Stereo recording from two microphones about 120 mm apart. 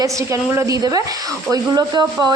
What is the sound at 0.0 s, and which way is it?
A woman's voice, 25° right (ahead or behind).